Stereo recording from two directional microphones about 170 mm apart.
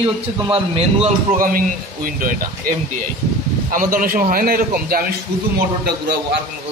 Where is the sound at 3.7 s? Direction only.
55° right (ahead or behind).